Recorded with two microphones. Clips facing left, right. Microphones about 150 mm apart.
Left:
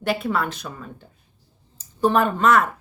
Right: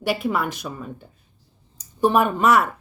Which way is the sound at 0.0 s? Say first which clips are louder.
Even; 10° right (ahead or behind).